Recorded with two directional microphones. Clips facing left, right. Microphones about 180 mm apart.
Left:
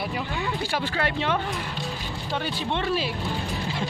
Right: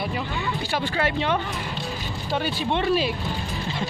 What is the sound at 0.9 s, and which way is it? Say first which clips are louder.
Speech: right 3 dB; centre (ahead or behind).